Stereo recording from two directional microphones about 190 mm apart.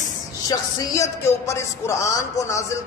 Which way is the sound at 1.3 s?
15° left (ahead or behind).